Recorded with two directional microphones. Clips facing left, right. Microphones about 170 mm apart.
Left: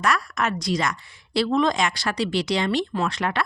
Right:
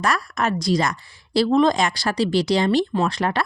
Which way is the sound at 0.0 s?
35° right (ahead or behind).